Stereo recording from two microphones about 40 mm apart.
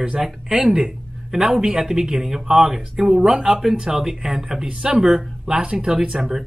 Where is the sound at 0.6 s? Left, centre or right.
Centre.